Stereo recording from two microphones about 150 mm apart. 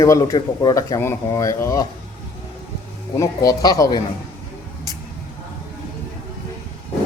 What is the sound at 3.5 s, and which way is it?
Speech, 25° left (ahead or behind).